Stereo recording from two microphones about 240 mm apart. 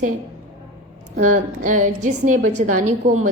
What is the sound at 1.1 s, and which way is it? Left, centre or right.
A woman's voice, right.